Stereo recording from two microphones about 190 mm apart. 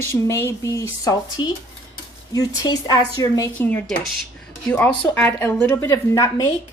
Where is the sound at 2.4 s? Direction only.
20° left (ahead or behind).